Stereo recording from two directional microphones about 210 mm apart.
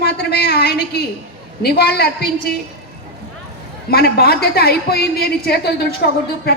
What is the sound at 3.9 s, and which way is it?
A woman's voice, 50° left (ahead or behind).